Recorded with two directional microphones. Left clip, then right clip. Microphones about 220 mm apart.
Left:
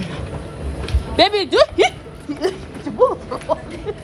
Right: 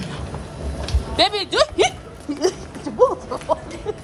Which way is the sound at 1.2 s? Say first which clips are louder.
Left 4 dB; 15° right (ahead or behind).